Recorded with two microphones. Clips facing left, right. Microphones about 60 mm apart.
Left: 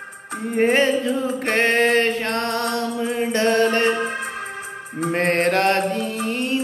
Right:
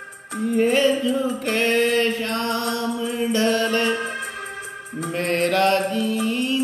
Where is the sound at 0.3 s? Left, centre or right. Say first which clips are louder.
Left 1 dB; left.